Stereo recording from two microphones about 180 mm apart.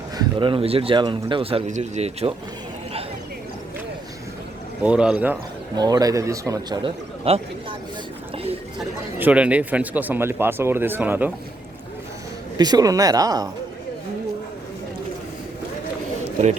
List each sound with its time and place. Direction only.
0.2 s speech: 30° right (ahead or behind)
4.8 s speech: 5° right (ahead or behind)
5.7 s speech: 20° right (ahead or behind)
7.3 s speech: 35° right (ahead or behind)
9.1 s speech: 10° right (ahead or behind)
12.5 s speech: 20° right (ahead or behind)